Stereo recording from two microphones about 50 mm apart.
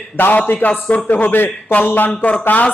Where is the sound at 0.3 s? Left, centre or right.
Left.